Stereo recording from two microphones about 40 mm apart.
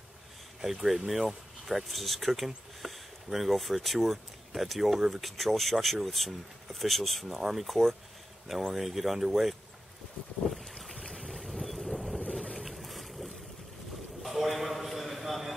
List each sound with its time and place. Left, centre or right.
0.6 s speech: centre
10.4 s boat: left
11.2 s boat: centre
14.2 s a sound: centre